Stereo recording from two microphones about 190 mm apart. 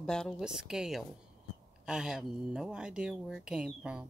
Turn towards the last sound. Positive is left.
turn(degrees=-5)  # may be behind; listen again after turning